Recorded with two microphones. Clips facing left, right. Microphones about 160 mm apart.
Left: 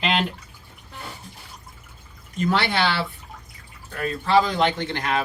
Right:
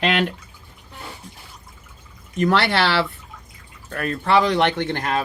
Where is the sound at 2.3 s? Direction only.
70° right (ahead or behind).